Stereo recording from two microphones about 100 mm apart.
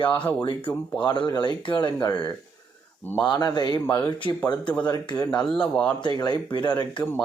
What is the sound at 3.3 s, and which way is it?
Speech, 45° left (ahead or behind).